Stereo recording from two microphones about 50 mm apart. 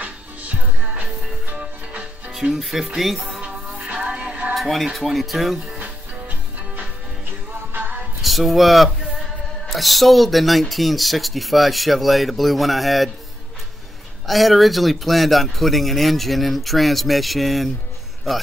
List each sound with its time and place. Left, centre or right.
0.0 s music: right
2.5 s speech: centre
3.3 s music: right
4.6 s speech: centre
7.7 s music: right
8.2 s speech: centre
14.2 s speech: centre